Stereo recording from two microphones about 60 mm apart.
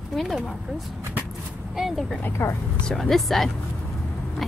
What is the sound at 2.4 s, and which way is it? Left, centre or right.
Speech, left.